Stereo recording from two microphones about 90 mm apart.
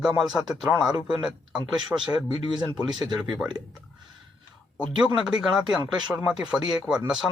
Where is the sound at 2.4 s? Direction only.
60° right (ahead or behind).